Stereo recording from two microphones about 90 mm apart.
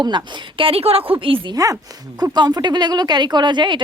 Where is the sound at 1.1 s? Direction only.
65° right (ahead or behind).